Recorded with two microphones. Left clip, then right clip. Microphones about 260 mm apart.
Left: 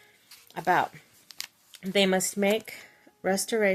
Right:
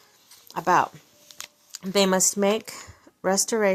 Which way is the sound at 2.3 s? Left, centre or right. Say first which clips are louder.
Right 3 dB; centre.